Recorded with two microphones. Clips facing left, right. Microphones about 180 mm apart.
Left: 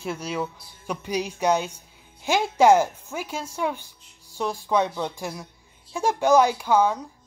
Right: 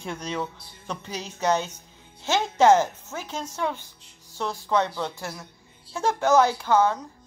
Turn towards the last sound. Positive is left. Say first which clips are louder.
# even
turn(degrees=10)  # may be behind; listen again after turning